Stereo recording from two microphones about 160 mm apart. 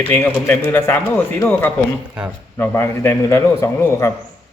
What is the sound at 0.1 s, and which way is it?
A man's voice, 10° left (ahead or behind).